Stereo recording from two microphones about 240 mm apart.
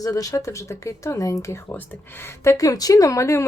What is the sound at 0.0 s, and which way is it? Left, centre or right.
Speech, centre.